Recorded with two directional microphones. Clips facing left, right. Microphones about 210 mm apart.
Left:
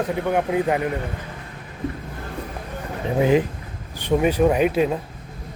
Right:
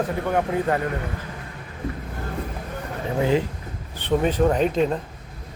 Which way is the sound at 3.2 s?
15° left (ahead or behind).